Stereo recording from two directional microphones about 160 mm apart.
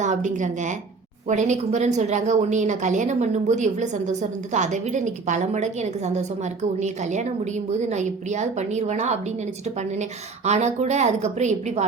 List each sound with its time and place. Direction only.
0.0 s a woman's voice: 50° right (ahead or behind)